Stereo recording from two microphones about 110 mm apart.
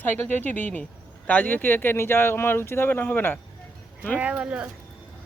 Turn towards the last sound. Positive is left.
turn(degrees=-10)  # may be behind; listen again after turning